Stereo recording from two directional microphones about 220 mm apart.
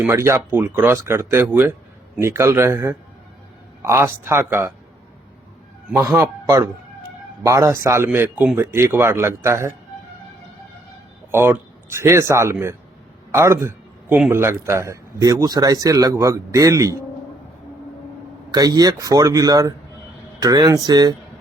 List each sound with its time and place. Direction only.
0.0 s a man's voice: 10° right (ahead or behind)
5.9 s a man's voice: 10° right (ahead or behind)
11.3 s a man's voice: 10° right (ahead or behind)
18.5 s a man's voice: 15° right (ahead or behind)